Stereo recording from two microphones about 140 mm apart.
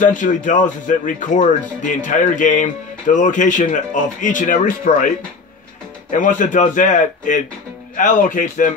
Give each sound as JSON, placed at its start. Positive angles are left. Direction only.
{"t": 0.0, "sound": "speech", "side_deg": 65}
{"t": 6.1, "sound": "a man's voice", "side_deg": 70}